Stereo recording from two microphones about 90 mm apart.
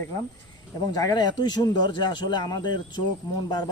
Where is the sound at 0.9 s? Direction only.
45° left (ahead or behind).